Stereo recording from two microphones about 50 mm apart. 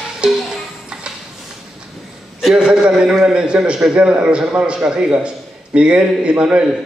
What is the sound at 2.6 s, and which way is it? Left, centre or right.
A man's voice, centre.